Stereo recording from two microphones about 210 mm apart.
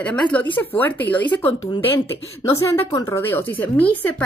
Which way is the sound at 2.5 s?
15° left (ahead or behind).